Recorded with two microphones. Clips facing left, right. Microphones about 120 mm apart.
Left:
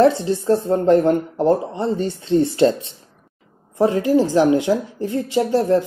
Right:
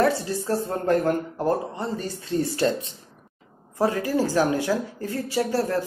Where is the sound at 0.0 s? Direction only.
25° left (ahead or behind).